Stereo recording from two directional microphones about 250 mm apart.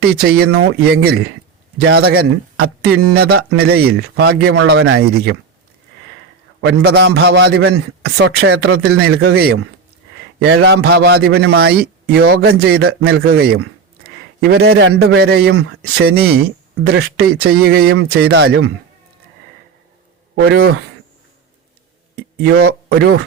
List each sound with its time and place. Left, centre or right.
0.2 s speech: right
6.6 s speech: right
20.3 s a man's voice: right
22.1 s speech: right